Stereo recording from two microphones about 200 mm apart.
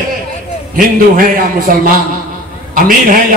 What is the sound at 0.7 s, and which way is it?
A man's voice, 45° right (ahead or behind).